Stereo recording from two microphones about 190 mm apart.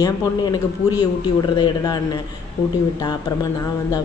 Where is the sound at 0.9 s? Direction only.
20° left (ahead or behind).